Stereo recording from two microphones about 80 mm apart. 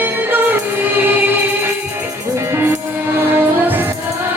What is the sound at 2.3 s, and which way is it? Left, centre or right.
Music, right.